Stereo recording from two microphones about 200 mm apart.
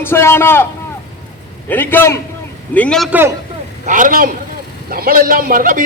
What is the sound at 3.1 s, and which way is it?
Speech, 10° right (ahead or behind).